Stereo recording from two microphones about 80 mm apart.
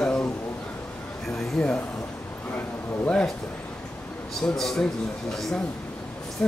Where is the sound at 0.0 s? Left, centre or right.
Centre.